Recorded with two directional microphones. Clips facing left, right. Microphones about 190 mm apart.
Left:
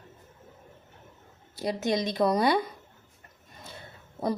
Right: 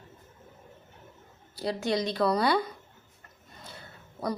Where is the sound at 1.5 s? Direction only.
20° left (ahead or behind).